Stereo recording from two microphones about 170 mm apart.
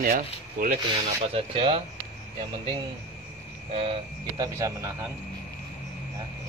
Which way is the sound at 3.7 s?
30° right (ahead or behind).